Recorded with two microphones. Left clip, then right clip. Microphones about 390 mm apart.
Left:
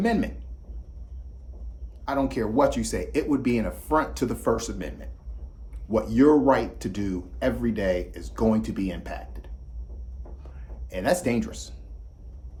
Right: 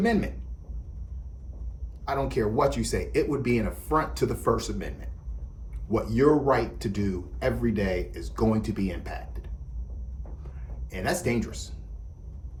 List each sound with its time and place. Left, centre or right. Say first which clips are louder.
0.0 s speech: left 1 dB; centre
2.0 s speech: left 1 dB; centre
10.8 s speech: left 4 dB; centre